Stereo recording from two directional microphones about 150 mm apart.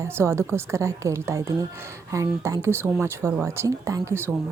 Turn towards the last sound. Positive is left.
turn(degrees=-15)  # may be behind; listen again after turning